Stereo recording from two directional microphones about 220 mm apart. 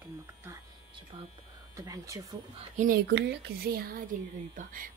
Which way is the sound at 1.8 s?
15° right (ahead or behind).